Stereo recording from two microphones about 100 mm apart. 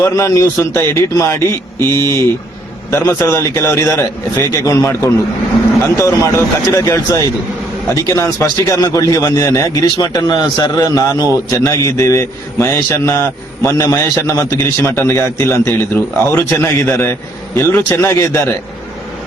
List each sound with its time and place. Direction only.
0.0 s a man's voice: 30° left (ahead or behind)